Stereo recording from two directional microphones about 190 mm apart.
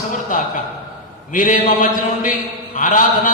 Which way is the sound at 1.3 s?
40° left (ahead or behind).